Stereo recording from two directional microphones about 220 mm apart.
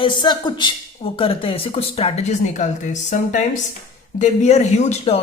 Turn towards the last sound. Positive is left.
turn(degrees=30)  # may be behind; listen again after turning